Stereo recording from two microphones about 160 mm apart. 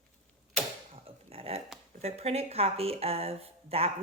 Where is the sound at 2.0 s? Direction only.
40° right (ahead or behind).